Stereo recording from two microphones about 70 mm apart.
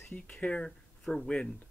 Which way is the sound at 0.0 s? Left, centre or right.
Centre.